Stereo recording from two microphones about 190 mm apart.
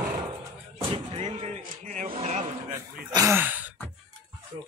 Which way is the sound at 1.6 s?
45° right (ahead or behind).